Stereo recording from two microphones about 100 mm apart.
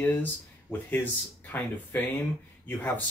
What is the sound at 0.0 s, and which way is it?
Speech, 20° left (ahead or behind).